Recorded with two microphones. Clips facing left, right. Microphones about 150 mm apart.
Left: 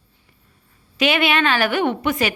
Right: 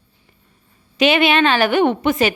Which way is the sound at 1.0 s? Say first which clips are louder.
Right 4 dB; 25° right (ahead or behind).